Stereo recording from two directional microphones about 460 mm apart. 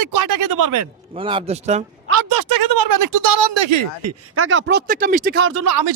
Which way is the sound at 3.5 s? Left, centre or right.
Right.